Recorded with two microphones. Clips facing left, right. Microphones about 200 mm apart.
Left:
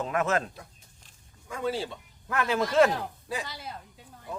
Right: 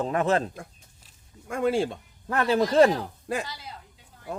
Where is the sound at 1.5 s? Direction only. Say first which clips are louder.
Right 6 dB; 55° right (ahead or behind).